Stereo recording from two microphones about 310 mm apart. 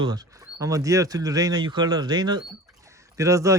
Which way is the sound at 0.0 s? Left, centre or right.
Centre.